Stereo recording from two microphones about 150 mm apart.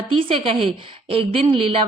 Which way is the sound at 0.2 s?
35° right (ahead or behind).